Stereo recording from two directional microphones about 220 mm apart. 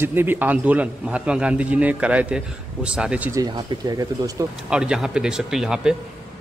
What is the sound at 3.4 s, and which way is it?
Speech, 15° right (ahead or behind).